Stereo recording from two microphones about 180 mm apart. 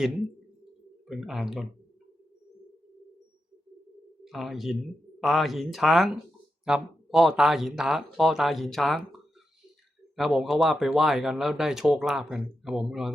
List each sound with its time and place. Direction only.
1.0 s speech: centre (ahead or behind)
4.2 s speech: centre (ahead or behind)
10.2 s speech: centre (ahead or behind)